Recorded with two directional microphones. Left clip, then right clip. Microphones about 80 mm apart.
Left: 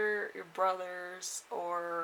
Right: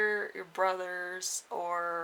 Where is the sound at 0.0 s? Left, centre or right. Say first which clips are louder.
Right 3 dB; right.